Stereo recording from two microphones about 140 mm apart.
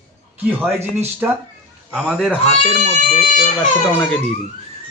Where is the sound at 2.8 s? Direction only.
60° left (ahead or behind).